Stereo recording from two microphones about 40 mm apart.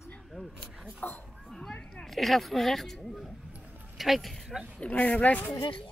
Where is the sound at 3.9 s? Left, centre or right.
Centre.